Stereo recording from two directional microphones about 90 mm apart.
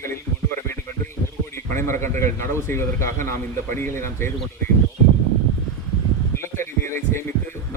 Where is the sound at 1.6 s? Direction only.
25° left (ahead or behind).